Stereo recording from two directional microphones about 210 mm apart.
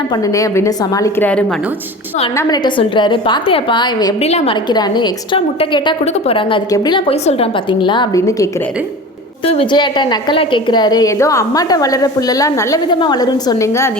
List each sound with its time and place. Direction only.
0.1 s a woman's voice: 15° left (ahead or behind)
2.3 s a woman's voice: 15° left (ahead or behind)
9.4 s a woman's voice: 25° left (ahead or behind)